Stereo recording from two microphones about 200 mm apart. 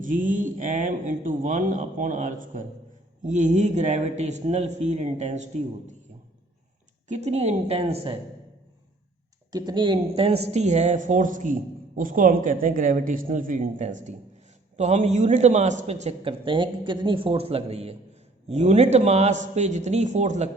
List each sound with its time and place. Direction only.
0.0 s a man's voice: 40° right (ahead or behind)
7.1 s a man's voice: 35° right (ahead or behind)
9.5 s a man's voice: 20° right (ahead or behind); by 20.5 s 35° right (ahead or behind)